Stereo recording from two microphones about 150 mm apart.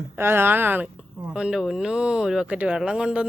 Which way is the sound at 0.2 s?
15° right (ahead or behind).